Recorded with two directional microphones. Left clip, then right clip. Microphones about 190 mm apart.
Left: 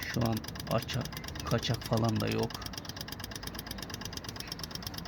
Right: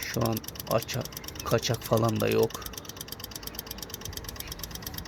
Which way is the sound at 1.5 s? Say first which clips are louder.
Right 7 dB; 25° right (ahead or behind).